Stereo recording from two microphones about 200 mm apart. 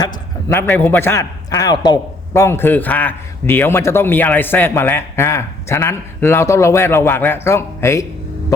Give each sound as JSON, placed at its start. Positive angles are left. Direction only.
{"t": 0.0, "sound": "a man's voice", "side_deg": 15}